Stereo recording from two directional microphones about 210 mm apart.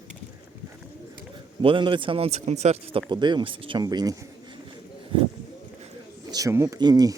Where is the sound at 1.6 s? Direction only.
25° right (ahead or behind).